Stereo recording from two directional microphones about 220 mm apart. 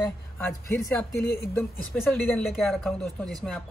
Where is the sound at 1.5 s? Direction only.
10° left (ahead or behind).